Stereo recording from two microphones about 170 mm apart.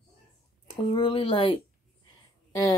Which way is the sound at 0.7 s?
30° left (ahead or behind).